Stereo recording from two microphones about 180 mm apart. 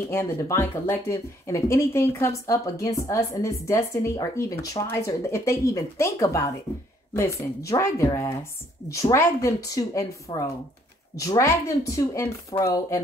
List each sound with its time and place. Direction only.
0.1 s a woman's voice: 15° left (ahead or behind)